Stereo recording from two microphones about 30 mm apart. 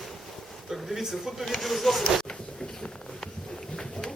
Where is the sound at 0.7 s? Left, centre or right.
Centre.